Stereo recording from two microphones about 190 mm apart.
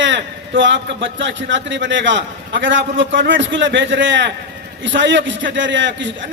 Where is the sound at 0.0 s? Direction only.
75° right (ahead or behind).